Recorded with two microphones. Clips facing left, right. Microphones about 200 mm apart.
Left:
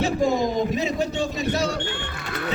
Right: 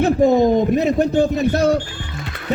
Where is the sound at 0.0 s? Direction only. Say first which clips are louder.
Right 8 dB; 55° right (ahead or behind).